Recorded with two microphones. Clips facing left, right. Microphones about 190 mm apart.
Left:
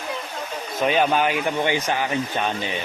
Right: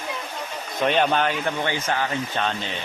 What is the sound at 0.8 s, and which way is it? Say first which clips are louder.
Speech: left 1 dB; 5° left (ahead or behind).